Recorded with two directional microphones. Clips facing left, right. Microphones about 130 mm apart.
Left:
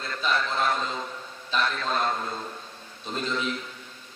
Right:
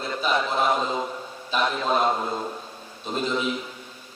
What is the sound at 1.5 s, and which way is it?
A man's voice, 15° right (ahead or behind).